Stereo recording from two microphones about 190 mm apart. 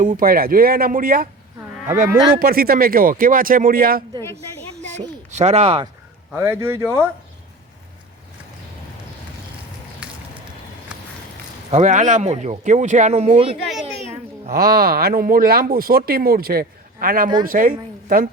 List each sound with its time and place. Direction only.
0.2 s speech: 50° right (ahead or behind)
2.4 s speech: 50° right (ahead or behind)
5.3 s speech: 35° right (ahead or behind)
6.3 s speech: 10° right (ahead or behind)
11.7 s speech: 40° right (ahead or behind)
14.5 s a woman's voice: 55° right (ahead or behind)